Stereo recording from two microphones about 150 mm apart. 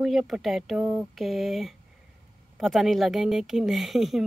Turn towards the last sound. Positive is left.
turn(degrees=0)  # may be behind; listen again after turning